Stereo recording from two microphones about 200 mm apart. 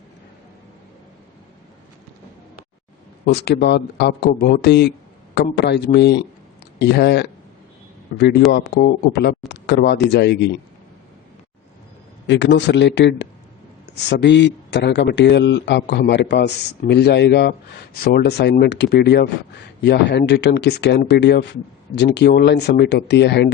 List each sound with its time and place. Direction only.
3.2 s speech: 55° left (ahead or behind)
8.5 s speech: 55° left (ahead or behind)
12.3 s speech: 65° left (ahead or behind)